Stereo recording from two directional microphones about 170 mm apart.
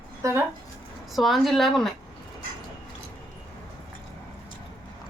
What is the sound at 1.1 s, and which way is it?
Speech, centre (ahead or behind).